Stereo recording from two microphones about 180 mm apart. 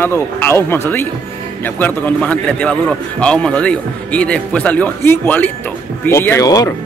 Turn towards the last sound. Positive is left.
turn(degrees=20)  # may be behind; listen again after turning